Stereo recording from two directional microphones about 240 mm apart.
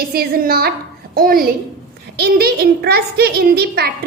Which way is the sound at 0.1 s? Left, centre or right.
Right.